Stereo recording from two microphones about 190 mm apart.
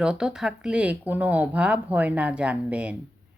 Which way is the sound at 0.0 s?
5° right (ahead or behind).